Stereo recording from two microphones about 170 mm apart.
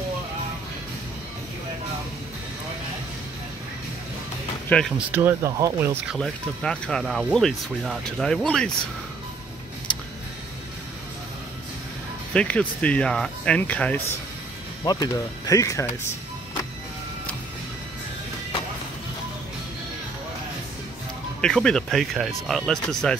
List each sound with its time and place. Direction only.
4.6 s speech: 5° left (ahead or behind)
4.9 s speech: 15° right (ahead or behind)
6.0 s speech: centre (ahead or behind)
12.4 s speech: 5° left (ahead or behind)
14.9 s speech: 20° left (ahead or behind)
21.4 s speech: 5° left (ahead or behind)